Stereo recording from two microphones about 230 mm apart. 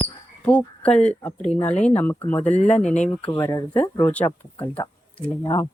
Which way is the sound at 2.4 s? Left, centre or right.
Left.